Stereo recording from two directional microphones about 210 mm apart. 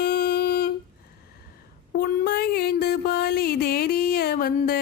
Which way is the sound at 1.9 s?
45° left (ahead or behind).